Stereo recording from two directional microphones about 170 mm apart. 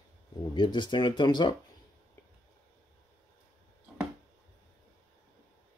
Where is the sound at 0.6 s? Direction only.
25° left (ahead or behind).